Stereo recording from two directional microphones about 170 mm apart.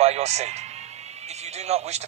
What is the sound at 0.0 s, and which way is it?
A man's voice, 40° right (ahead or behind).